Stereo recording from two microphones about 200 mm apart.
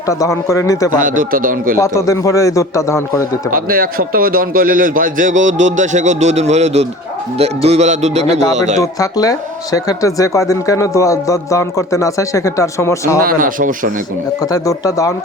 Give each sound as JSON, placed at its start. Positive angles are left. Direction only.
{"t": 0.1, "sound": "speech", "side_deg": 15}
{"t": 0.9, "sound": "a man's voice", "side_deg": -45}
{"t": 1.8, "sound": "speech", "side_deg": 15}
{"t": 3.5, "sound": "a man's voice", "side_deg": -45}
{"t": 8.8, "sound": "speech", "side_deg": 15}
{"t": 13.2, "sound": "a man's voice", "side_deg": -45}
{"t": 14.5, "sound": "speech", "side_deg": 15}